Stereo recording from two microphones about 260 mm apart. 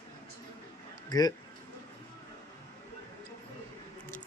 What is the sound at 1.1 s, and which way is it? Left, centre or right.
Speech, centre.